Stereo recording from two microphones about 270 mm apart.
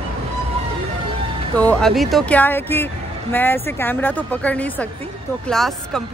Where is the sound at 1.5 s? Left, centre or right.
Centre.